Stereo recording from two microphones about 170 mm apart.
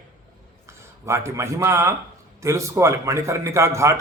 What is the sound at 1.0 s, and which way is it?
A man's voice, 15° right (ahead or behind).